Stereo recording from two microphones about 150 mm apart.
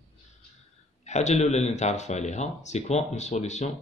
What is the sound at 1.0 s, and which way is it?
Speech, 50° left (ahead or behind).